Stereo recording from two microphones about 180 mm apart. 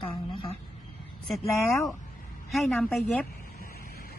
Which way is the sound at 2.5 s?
Centre (ahead or behind).